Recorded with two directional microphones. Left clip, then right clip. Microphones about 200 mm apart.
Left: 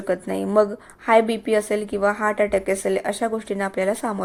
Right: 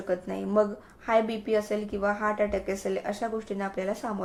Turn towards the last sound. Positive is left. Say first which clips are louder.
# left 8 dB
turn(degrees=40)  # may be behind; listen again after turning